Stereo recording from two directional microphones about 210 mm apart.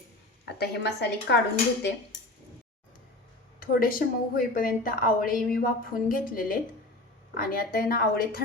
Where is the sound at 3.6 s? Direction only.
40° left (ahead or behind).